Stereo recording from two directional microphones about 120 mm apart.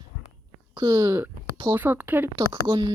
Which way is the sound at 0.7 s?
35° right (ahead or behind).